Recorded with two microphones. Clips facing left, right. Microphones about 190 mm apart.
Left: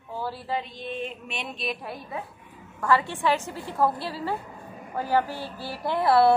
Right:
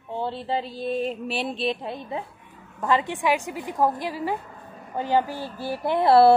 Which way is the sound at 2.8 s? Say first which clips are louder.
Right 1 dB; 20° right (ahead or behind).